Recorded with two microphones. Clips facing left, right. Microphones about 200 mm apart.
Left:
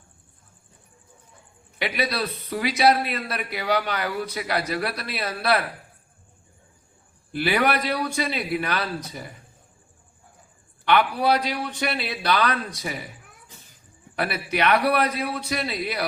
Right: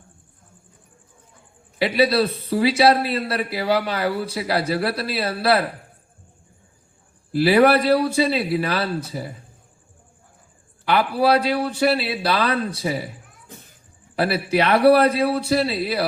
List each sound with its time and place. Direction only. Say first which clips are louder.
1.8 s speech: right 8 dB; 30° right (ahead or behind)
7.3 s speech: right 8 dB; 30° right (ahead or behind)
10.8 s speech: right 2 dB; 30° right (ahead or behind)
14.2 s speech: right 5 dB; 30° right (ahead or behind)